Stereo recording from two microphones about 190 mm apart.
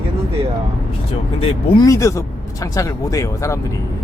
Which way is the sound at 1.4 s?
30° left (ahead or behind).